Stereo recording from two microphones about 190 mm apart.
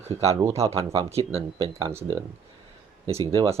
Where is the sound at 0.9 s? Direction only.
30° right (ahead or behind).